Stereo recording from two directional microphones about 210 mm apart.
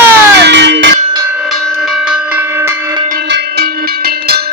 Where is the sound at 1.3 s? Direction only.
Centre (ahead or behind).